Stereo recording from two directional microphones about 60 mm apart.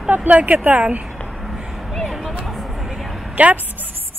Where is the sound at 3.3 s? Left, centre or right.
Right.